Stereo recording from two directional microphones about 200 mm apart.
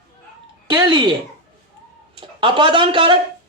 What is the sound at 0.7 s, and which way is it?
Speech, 20° right (ahead or behind).